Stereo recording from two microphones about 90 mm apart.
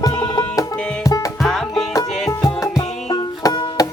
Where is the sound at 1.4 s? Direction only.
5° left (ahead or behind).